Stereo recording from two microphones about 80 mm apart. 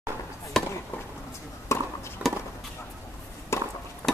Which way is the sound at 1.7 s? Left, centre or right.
Left.